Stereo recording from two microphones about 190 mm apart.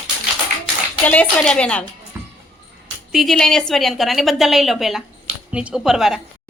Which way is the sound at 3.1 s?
Centre (ahead or behind).